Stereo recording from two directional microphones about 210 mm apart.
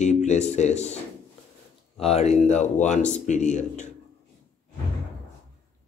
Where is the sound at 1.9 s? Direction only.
30° left (ahead or behind).